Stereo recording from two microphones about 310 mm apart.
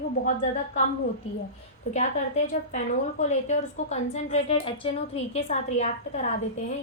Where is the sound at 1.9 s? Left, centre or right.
Left.